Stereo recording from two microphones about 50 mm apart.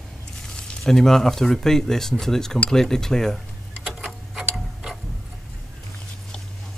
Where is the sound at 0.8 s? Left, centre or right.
Centre.